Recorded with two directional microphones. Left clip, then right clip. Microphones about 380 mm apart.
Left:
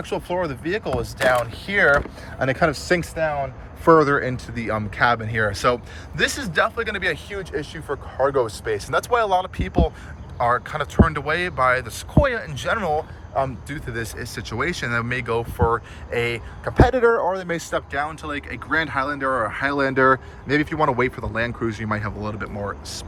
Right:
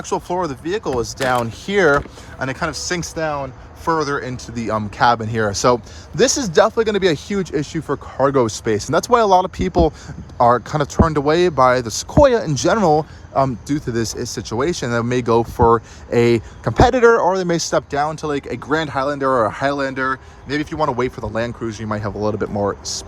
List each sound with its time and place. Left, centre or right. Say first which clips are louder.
0.0 s speech: right 3 dB; centre